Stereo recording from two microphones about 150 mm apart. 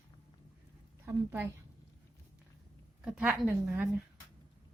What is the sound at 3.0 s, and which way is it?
Speech, 10° right (ahead or behind).